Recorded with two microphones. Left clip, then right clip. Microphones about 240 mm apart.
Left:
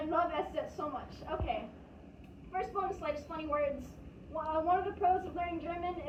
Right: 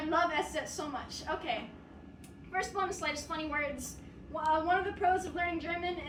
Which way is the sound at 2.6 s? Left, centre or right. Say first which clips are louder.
Right 2 dB; right.